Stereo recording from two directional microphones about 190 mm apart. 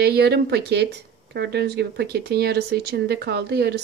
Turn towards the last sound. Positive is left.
turn(degrees=-60)  # may be behind; listen again after turning